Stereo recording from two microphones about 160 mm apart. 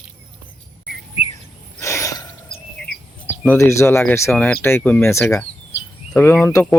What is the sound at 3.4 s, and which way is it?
Speech, 15° left (ahead or behind).